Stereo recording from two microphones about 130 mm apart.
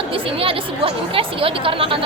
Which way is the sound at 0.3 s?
45° right (ahead or behind).